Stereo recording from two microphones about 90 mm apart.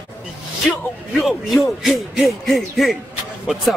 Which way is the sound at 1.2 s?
Centre (ahead or behind).